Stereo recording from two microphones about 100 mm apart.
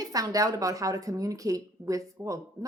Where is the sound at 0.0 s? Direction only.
35° right (ahead or behind).